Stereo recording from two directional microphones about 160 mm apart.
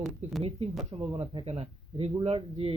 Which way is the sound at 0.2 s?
45° right (ahead or behind).